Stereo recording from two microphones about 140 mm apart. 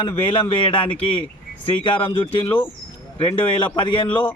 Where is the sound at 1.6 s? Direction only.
40° left (ahead or behind).